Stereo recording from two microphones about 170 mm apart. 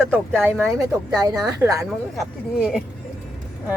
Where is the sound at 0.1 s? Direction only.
10° right (ahead or behind).